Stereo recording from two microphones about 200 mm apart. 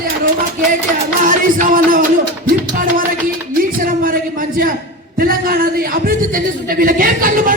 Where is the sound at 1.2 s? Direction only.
40° right (ahead or behind).